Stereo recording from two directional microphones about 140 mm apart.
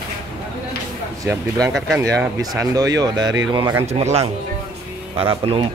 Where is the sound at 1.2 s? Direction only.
25° right (ahead or behind).